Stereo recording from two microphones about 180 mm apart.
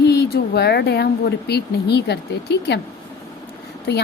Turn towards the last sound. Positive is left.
turn(degrees=65)  # may be behind; listen again after turning